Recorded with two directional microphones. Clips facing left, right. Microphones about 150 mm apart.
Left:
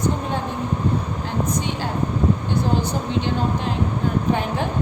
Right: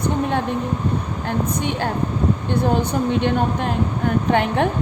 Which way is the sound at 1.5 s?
55° right (ahead or behind).